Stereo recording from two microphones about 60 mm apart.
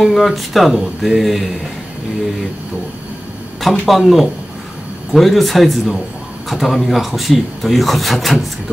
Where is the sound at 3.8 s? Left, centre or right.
Centre.